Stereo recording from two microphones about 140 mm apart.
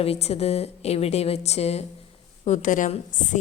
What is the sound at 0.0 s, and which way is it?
A woman's voice, 45° left (ahead or behind).